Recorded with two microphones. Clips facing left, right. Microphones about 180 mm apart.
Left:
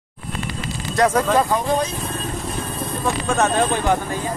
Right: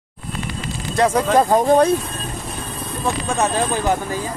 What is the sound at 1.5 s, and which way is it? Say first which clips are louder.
Speech: right 6 dB; 45° right (ahead or behind).